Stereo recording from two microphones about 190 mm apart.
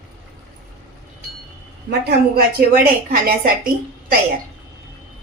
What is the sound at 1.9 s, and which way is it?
A woman's voice, 55° right (ahead or behind).